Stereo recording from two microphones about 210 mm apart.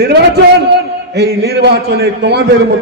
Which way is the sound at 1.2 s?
50° right (ahead or behind).